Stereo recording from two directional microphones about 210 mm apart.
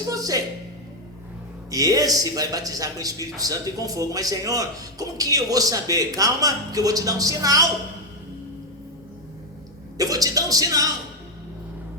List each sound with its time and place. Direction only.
0.1 s a man's voice: 15° right (ahead or behind)
1.7 s a man's voice: 15° right (ahead or behind)
10.0 s a man's voice: 15° right (ahead or behind)